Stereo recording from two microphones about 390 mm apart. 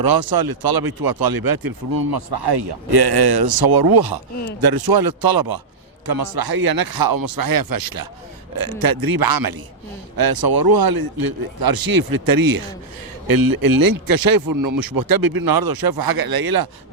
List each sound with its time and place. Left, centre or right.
0.0 s speech: right